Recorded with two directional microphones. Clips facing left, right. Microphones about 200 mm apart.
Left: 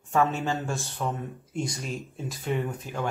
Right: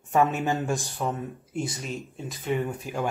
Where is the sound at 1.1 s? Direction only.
5° right (ahead or behind).